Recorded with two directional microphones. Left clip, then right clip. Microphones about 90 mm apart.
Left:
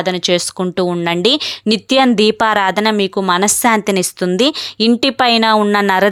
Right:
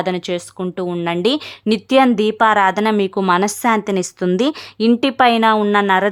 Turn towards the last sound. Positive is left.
turn(degrees=30)  # may be behind; listen again after turning